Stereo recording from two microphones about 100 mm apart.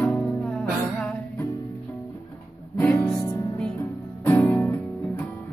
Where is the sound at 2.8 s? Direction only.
20° left (ahead or behind).